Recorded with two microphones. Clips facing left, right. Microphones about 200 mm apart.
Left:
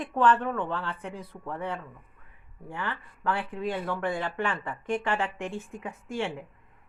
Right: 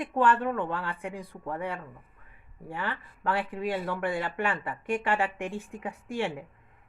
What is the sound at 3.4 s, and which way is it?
Speech, 10° right (ahead or behind).